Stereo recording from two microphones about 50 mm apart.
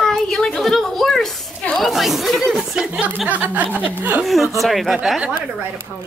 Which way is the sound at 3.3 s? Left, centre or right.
Right.